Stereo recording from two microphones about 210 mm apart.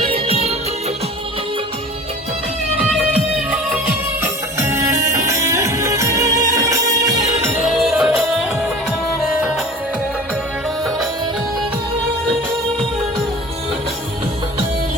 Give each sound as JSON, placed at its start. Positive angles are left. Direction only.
{"t": 0.1, "sound": "music", "side_deg": -30}
{"t": 3.3, "sound": "music", "side_deg": -5}
{"t": 7.8, "sound": "music", "side_deg": 0}